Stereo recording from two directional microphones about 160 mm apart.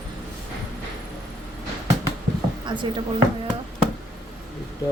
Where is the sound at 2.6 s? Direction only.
30° right (ahead or behind).